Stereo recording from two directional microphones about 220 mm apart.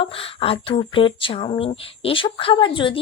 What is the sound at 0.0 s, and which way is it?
A woman's voice, 25° left (ahead or behind).